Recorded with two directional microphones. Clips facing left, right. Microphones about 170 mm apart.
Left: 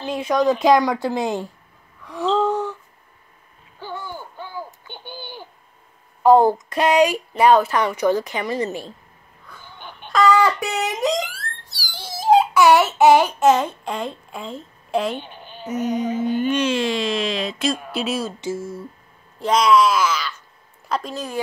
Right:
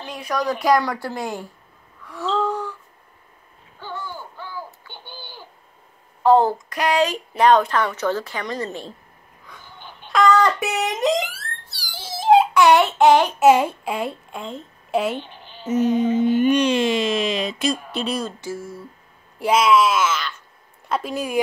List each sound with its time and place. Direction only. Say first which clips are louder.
0.0 s speech: left 6 dB; 25° left (ahead or behind)
2.0 s gasp: left 3 dB; 15° left (ahead or behind)
3.8 s a sound: left 1 dB; 15° left (ahead or behind)
6.2 s a child's voice: left 2 dB; 10° left (ahead or behind)
6.7 s a sound: left 3 dB; 25° left (ahead or behind)
7.0 s a woman's voice: left 1 dB; 10° left (ahead or behind)
10.0 s speech: even; 5° left (ahead or behind)
11.8 s a sound: even; centre (ahead or behind)
13.4 s a child's voice: right 2 dB; 10° right (ahead or behind)
15.6 s music: right 4 dB; 30° right (ahead or behind)
16.5 s speech: right 2 dB; centre (ahead or behind)
18.4 s speech: left 4 dB; 25° left (ahead or behind)
19.3 s a woman's voice: even; 10° right (ahead or behind)